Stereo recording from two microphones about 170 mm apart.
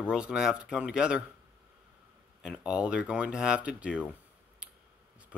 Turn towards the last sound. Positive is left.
turn(degrees=-5)  # may be behind; listen again after turning